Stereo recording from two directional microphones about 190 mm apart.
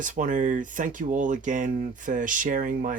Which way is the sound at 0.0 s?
40° right (ahead or behind).